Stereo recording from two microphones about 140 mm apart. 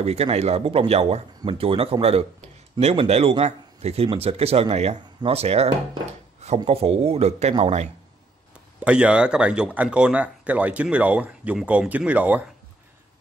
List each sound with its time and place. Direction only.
0.0 s speech: 50° right (ahead or behind)
8.7 s speech: 10° right (ahead or behind)